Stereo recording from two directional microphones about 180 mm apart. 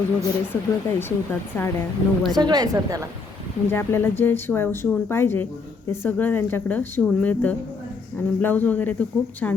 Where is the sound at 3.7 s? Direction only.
15° left (ahead or behind).